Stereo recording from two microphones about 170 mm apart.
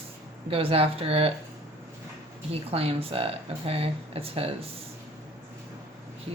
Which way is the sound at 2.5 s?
35° right (ahead or behind).